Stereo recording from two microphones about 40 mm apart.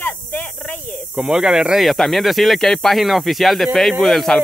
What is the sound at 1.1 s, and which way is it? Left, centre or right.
Speech, right.